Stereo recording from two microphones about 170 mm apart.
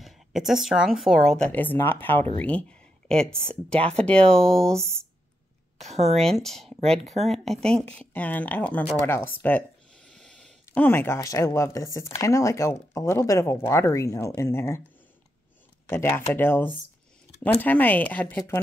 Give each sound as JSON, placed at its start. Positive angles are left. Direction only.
{"t": 0.0, "sound": "speech", "side_deg": 0}
{"t": 5.9, "sound": "speech", "side_deg": -40}
{"t": 6.1, "sound": "speech", "side_deg": 0}
{"t": 15.9, "sound": "speech", "side_deg": 15}